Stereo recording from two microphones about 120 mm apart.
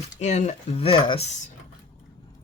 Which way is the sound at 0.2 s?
70° left (ahead or behind).